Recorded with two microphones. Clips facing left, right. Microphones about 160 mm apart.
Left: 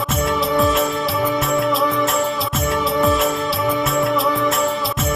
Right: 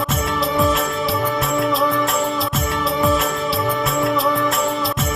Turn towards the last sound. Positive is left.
turn(degrees=0)  # may be behind; listen again after turning